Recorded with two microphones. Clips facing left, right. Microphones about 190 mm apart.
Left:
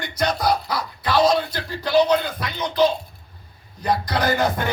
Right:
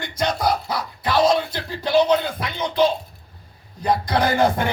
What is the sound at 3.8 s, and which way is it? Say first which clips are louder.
Speech: right 2 dB; 25° right (ahead or behind).